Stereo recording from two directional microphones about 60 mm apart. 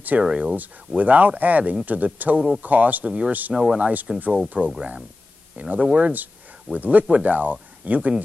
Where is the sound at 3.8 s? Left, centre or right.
Right.